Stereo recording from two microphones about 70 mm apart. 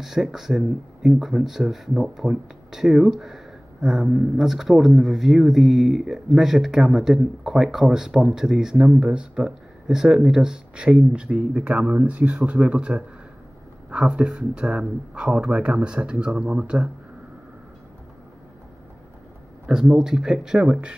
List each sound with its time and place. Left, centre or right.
0.0 s speech: centre
19.6 s speech: centre